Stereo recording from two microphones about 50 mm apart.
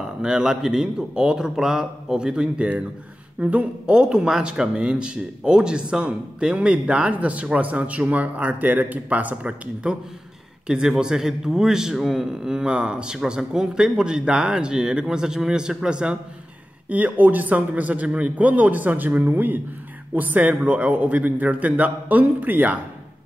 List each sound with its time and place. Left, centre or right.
0.2 s speech: centre
16.9 s a man's voice: right